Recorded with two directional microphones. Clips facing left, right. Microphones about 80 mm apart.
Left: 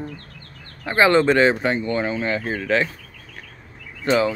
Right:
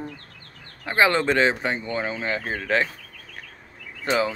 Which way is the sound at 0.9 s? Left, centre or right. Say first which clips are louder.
Left 4 dB; centre.